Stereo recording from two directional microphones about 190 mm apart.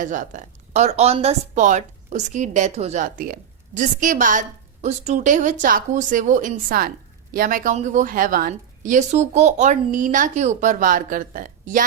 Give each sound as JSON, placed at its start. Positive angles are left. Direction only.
{"t": 0.0, "sound": "a woman's voice", "side_deg": -45}